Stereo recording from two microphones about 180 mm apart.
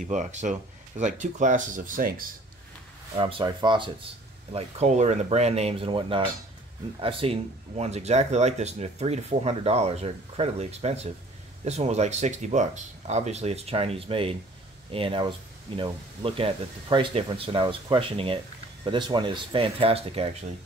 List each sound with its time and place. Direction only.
0.0 s speech: 45° right (ahead or behind)
3.2 s speech: 30° right (ahead or behind)